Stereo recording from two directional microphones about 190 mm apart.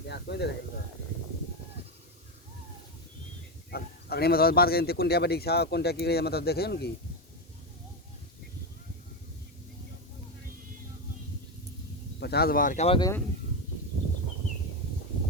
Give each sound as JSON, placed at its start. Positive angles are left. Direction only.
{"t": 0.1, "sound": "speech", "side_deg": 60}
{"t": 3.7, "sound": "speech", "side_deg": 55}
{"t": 12.2, "sound": "speech", "side_deg": 55}
{"t": 13.0, "sound": "speech", "side_deg": 15}